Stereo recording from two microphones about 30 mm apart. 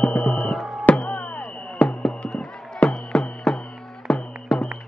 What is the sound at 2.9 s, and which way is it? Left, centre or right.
Music, left.